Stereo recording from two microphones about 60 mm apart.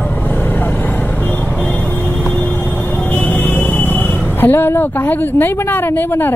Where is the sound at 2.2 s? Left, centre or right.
Left.